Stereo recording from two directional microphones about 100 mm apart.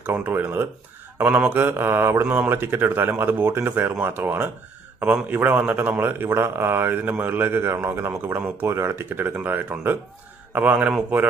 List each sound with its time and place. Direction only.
0.0 s speech: 20° right (ahead or behind)